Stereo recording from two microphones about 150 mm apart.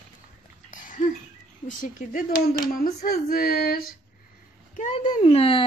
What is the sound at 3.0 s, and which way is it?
Female singing, 80° left.